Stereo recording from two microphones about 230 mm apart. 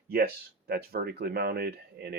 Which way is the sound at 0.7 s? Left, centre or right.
Right.